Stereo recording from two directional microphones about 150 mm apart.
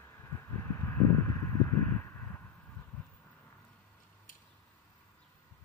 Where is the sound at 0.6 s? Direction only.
20° left (ahead or behind).